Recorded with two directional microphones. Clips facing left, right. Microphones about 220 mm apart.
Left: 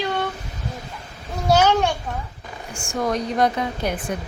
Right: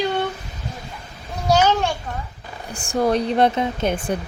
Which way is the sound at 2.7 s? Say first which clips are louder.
Right 4 dB; 35° right (ahead or behind).